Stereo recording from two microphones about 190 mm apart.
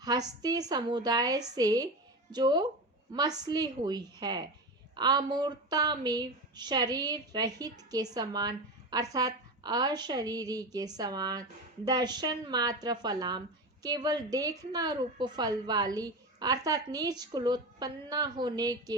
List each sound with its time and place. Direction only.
0.0 s speech: 20° right (ahead or behind)